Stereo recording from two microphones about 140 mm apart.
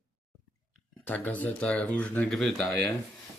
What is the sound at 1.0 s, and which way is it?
Speech, 10° left (ahead or behind).